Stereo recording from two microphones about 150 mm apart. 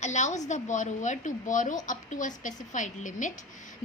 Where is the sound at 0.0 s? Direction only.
50° left (ahead or behind).